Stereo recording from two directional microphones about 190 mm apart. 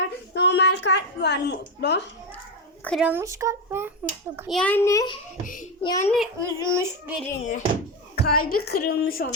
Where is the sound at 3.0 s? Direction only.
10° right (ahead or behind).